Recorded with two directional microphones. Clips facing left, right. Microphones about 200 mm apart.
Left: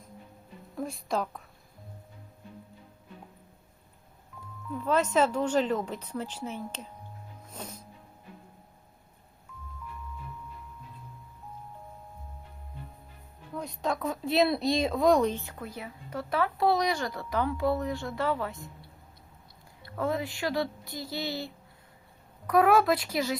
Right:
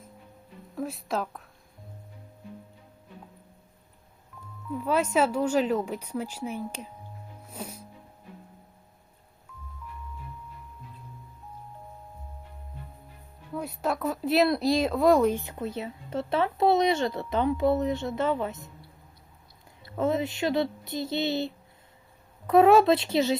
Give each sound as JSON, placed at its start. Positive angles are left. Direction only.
{"t": 0.8, "sound": "speech", "side_deg": 0}
{"t": 4.8, "sound": "a woman's voice", "side_deg": -10}
{"t": 7.4, "sound": "music", "side_deg": -10}
{"t": 13.5, "sound": "speech", "side_deg": -5}
{"t": 15.4, "sound": "a woman's voice", "side_deg": -20}
{"t": 19.8, "sound": "a woman's voice", "side_deg": -20}